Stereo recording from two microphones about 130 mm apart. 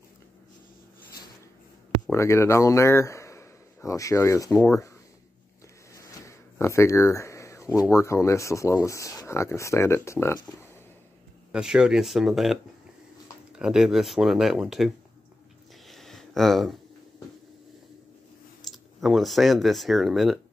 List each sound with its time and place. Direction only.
2.1 s speech: 20° left (ahead or behind)
5.9 s speech: 20° left (ahead or behind)
11.5 s speech: 5° right (ahead or behind)
15.9 s a sound: centre (ahead or behind)
18.7 s speech: centre (ahead or behind)